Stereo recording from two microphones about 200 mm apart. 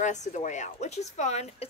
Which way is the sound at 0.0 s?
35° left (ahead or behind).